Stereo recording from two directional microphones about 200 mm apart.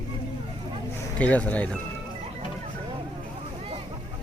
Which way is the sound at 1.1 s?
5° left (ahead or behind).